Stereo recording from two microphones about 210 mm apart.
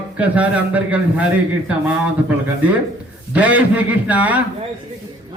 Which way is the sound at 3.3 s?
5° right (ahead or behind).